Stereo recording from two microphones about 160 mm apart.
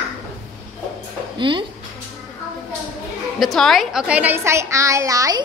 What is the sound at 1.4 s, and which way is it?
Speech, 30° right (ahead or behind).